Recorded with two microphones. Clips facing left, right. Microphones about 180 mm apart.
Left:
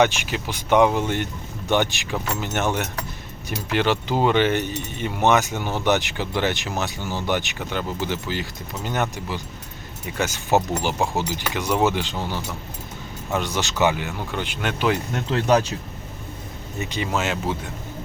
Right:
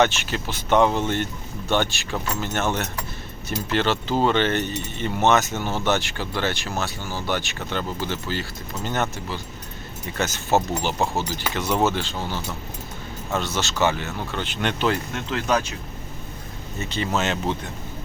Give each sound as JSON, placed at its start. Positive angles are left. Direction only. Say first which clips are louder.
{"t": 0.0, "sound": "speech", "louder": "left 1 dB", "side_deg": 15}
{"t": 15.1, "sound": "speech", "louder": "left 4 dB", "side_deg": 35}
{"t": 16.8, "sound": "speech", "louder": "even", "side_deg": 15}